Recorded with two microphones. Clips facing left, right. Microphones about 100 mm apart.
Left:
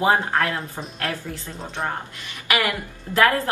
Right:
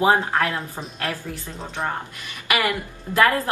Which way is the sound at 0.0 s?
10° right (ahead or behind).